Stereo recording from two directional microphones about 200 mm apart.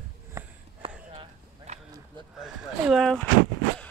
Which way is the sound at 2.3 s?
5° right (ahead or behind).